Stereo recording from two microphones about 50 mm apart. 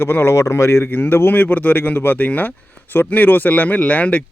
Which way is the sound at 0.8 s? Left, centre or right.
Left.